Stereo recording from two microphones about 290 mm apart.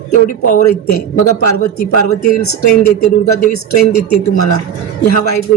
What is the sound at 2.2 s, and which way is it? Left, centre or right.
Speech, left.